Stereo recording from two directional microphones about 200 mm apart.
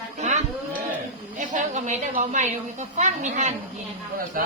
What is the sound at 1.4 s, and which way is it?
A woman's voice, 40° right (ahead or behind).